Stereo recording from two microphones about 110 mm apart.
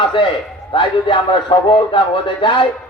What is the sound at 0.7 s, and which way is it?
A man's voice, 50° left (ahead or behind).